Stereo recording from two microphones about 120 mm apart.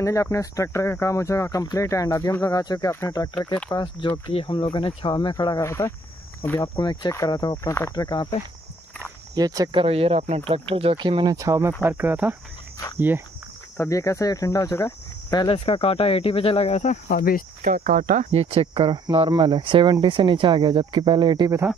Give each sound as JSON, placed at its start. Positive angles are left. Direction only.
{"t": 0.0, "sound": "speech", "side_deg": 25}
{"t": 3.7, "sound": "speech", "side_deg": 40}
{"t": 5.6, "sound": "speech", "side_deg": 25}
{"t": 6.6, "sound": "speech", "side_deg": 40}
{"t": 7.9, "sound": "speech", "side_deg": 35}
{"t": 9.3, "sound": "speech", "side_deg": -30}
{"t": 9.8, "sound": "speech", "side_deg": -55}
{"t": 11.3, "sound": "speech", "side_deg": -25}
{"t": 11.8, "sound": "speech", "side_deg": -15}
{"t": 12.7, "sound": "speech", "side_deg": 30}
{"t": 15.3, "sound": "speech", "side_deg": 45}
{"t": 17.6, "sound": "speech", "side_deg": -90}